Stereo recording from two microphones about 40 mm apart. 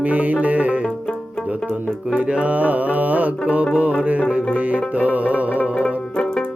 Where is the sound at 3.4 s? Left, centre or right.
Right.